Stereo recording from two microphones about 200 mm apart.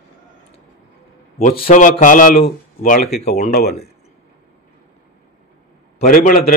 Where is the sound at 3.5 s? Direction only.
50° left (ahead or behind).